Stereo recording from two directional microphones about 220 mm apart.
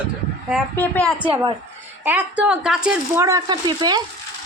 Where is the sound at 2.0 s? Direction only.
5° right (ahead or behind).